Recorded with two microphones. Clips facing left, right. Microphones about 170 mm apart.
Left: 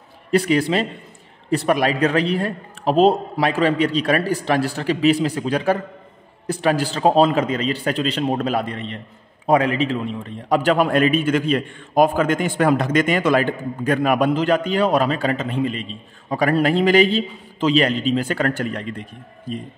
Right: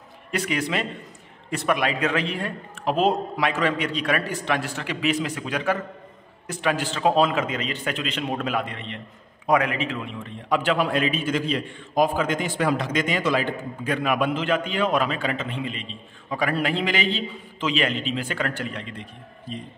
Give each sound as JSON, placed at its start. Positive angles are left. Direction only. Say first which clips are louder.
{"t": 0.3, "sound": "a man's voice", "louder": "left 8 dB", "side_deg": 35}